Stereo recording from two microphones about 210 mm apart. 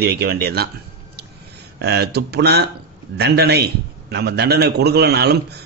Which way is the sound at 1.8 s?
50° right (ahead or behind).